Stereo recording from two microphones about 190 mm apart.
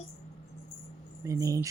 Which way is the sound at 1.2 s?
15° right (ahead or behind).